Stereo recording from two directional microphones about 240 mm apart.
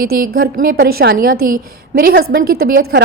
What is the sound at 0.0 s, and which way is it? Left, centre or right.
A woman's voice, right.